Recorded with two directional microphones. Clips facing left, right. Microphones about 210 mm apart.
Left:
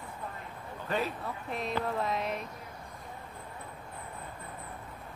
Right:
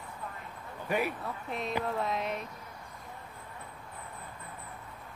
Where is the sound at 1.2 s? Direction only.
Centre (ahead or behind).